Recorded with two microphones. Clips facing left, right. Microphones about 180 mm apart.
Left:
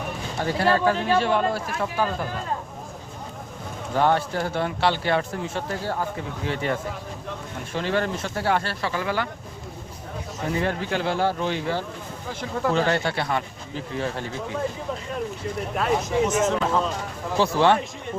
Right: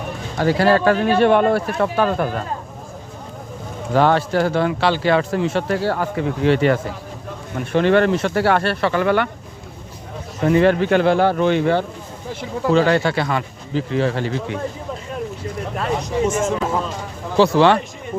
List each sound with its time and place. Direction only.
0.3 s speech: 90° right
0.9 s speech: 65° right (ahead or behind)
3.9 s speech: 90° right
7.7 s speech: 65° right (ahead or behind)
10.4 s speech: 85° right; by 11.9 s 65° right (ahead or behind)
12.7 s speech: 90° right
15.7 s speech: centre (ahead or behind)
16.4 s speech: 10° right (ahead or behind)
17.3 s speech: 90° right